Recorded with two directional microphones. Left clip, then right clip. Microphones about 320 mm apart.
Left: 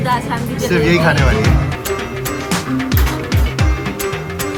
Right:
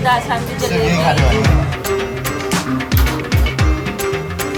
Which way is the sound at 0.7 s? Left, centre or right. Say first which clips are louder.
Left 2 dB; centre.